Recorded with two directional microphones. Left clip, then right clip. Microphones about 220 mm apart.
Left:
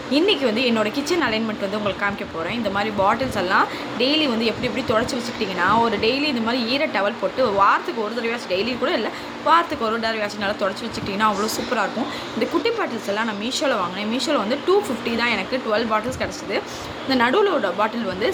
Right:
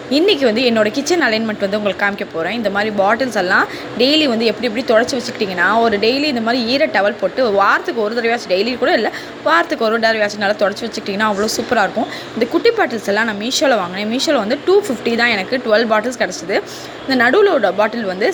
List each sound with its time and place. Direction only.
0.1 s a woman's voice: 20° right (ahead or behind)
11.7 s a woman's voice: 20° right (ahead or behind)